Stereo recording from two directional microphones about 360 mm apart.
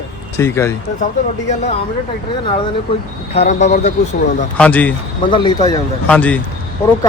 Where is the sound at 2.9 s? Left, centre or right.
Centre.